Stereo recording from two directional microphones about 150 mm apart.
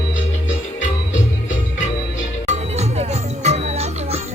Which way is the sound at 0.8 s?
55° left (ahead or behind).